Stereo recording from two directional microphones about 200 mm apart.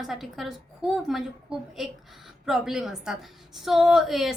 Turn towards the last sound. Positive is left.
turn(degrees=0)  # may be behind; listen again after turning